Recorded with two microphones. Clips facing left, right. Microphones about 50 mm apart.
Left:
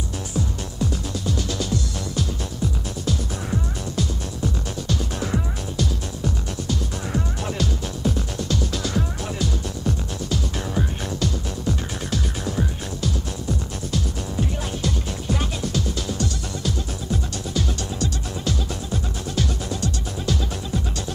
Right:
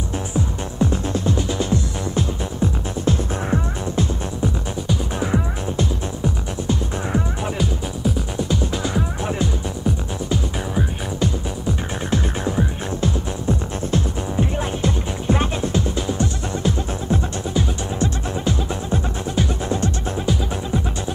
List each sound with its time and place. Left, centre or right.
0.3 s music: right